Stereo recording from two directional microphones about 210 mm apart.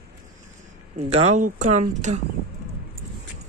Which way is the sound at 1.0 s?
30° right (ahead or behind).